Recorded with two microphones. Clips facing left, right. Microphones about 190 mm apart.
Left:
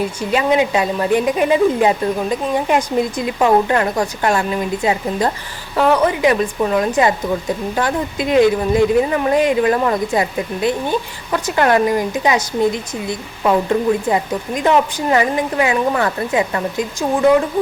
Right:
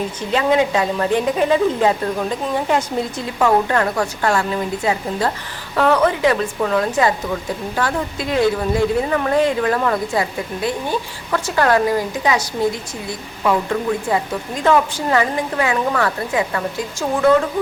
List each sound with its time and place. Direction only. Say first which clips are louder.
0.2 s speech: even; 10° left (ahead or behind)